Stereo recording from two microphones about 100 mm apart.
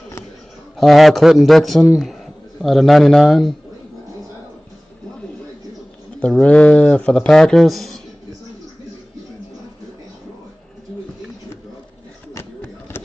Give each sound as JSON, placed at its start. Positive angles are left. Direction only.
{"t": 0.7, "sound": "a man's voice", "side_deg": 0}
{"t": 6.4, "sound": "speech", "side_deg": 10}
{"t": 12.6, "sound": "a sound", "side_deg": 25}